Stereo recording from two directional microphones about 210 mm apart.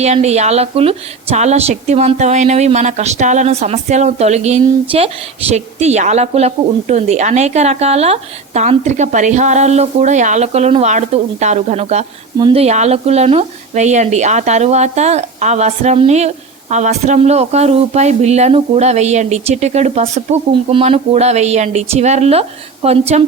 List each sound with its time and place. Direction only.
0.0 s a woman's voice: 30° right (ahead or behind)